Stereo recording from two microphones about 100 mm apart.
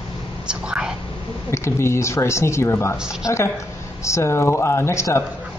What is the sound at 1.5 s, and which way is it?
A man's voice, 25° left (ahead or behind).